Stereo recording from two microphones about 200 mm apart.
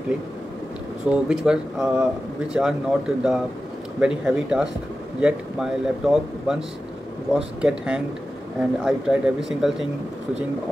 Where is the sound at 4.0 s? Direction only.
5° right (ahead or behind).